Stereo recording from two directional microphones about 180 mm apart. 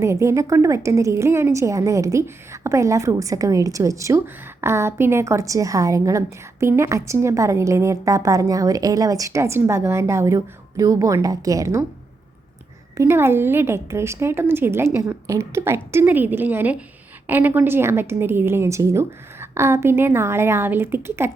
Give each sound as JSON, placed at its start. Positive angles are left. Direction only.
{"t": 0.0, "sound": "a woman's voice", "side_deg": -15}
{"t": 13.0, "sound": "a woman's voice", "side_deg": -15}